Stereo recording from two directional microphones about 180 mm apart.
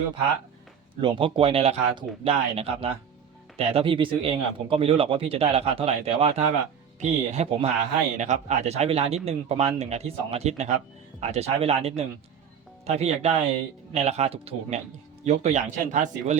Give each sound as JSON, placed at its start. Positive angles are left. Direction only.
{"t": 1.0, "sound": "speech", "side_deg": -30}